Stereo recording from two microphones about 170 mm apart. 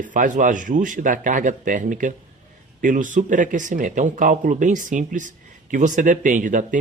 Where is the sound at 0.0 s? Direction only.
50° right (ahead or behind).